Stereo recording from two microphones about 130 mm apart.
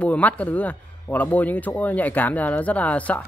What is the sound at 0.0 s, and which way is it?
A man's voice, 10° left (ahead or behind).